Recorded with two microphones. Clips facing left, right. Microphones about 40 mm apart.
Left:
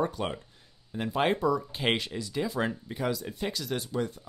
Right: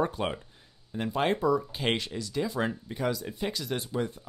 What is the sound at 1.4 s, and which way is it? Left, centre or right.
Speech, centre.